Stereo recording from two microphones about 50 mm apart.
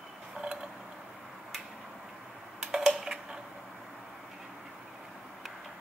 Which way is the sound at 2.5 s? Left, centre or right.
Centre.